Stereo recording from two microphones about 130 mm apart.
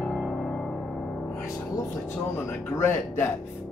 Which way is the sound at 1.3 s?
20° left (ahead or behind).